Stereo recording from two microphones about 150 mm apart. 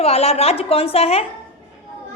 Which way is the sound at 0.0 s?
40° left (ahead or behind).